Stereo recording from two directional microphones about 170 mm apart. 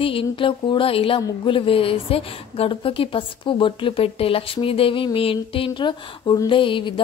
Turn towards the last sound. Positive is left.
turn(degrees=30)  # may be behind; listen again after turning